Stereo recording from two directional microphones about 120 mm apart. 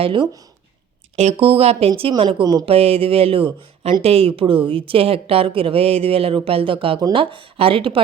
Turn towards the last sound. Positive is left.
turn(degrees=-50)  # may be behind; listen again after turning